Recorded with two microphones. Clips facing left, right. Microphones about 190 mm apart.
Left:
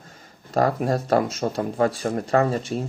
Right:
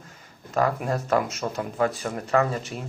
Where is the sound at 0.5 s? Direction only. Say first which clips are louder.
Left 3 dB; 35° left (ahead or behind).